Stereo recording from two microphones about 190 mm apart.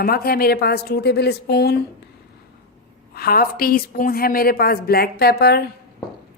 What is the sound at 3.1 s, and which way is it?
Speech, 55° left (ahead or behind).